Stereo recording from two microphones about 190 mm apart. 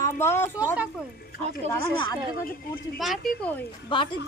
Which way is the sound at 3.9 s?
25° left (ahead or behind).